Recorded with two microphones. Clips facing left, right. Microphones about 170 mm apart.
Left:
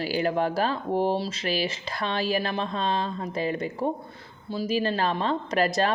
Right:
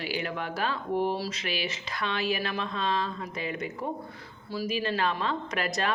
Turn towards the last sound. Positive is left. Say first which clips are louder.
# left 6 dB
turn(degrees=35)  # may be behind; listen again after turning